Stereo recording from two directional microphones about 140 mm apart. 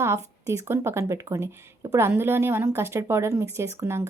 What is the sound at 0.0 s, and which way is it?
Speech, 20° right (ahead or behind).